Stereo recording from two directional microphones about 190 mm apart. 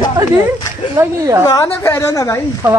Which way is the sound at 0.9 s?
15° right (ahead or behind).